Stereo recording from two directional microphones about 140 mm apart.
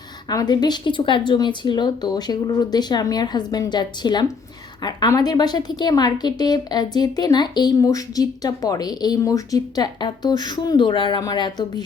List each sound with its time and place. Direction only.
0.3 s a woman's voice: 30° left (ahead or behind)